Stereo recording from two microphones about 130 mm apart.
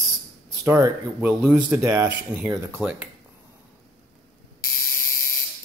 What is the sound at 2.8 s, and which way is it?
Speech, 10° right (ahead or behind).